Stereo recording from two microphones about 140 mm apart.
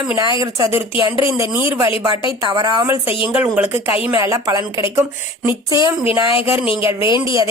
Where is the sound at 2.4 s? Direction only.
30° right (ahead or behind).